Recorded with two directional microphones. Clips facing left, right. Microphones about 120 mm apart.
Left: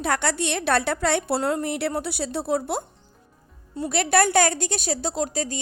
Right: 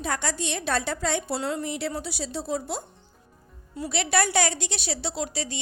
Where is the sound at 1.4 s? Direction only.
50° left (ahead or behind).